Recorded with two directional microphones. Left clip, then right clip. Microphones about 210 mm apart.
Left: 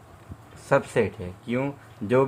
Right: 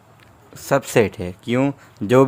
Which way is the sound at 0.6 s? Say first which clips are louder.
Right 5 dB; 50° right (ahead or behind).